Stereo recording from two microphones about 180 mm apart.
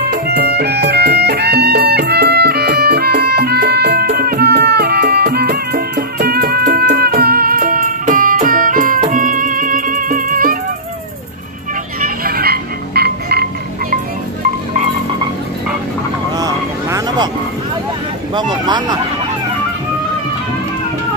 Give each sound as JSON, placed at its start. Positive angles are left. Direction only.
{"t": 0.1, "sound": "music", "side_deg": -65}
{"t": 12.0, "sound": "croak", "side_deg": -55}
{"t": 16.3, "sound": "vehicle", "side_deg": -20}
{"t": 18.3, "sound": "a sound", "side_deg": -25}